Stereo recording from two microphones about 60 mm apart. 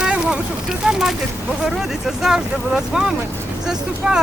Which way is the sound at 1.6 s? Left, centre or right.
Centre.